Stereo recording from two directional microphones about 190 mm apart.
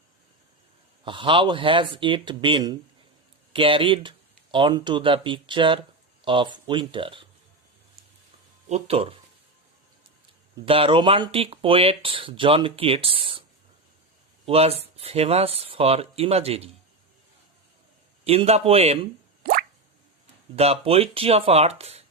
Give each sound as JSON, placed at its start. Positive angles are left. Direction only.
{"t": 1.0, "sound": "speech", "side_deg": -25}
{"t": 8.7, "sound": "speech", "side_deg": -30}
{"t": 10.7, "sound": "speech", "side_deg": -30}
{"t": 14.4, "sound": "speech", "side_deg": -30}
{"t": 18.3, "sound": "speech", "side_deg": -30}
{"t": 19.4, "sound": "drip", "side_deg": -50}
{"t": 20.6, "sound": "speech", "side_deg": -30}